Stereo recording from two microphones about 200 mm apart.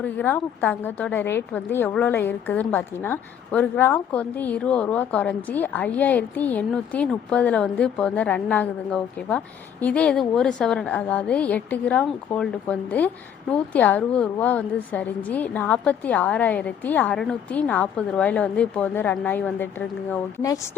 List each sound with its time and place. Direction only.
0.0 s a woman's voice: 10° left (ahead or behind)